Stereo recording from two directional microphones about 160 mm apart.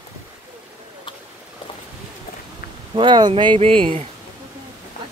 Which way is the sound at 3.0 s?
30° right (ahead or behind).